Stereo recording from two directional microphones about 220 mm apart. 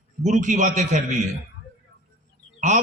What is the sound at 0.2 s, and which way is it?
Speech, 35° right (ahead or behind).